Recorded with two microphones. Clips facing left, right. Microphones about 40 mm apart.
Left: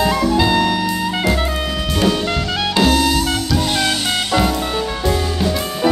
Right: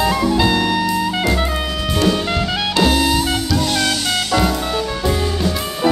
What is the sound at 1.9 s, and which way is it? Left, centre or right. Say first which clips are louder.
Music: even; centre.